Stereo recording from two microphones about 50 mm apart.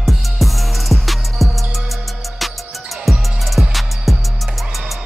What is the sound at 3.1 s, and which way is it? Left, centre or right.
Music, centre.